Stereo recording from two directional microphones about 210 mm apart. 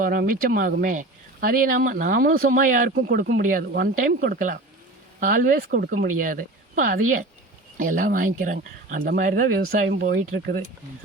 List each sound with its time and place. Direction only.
0.0 s speech: 45° right (ahead or behind)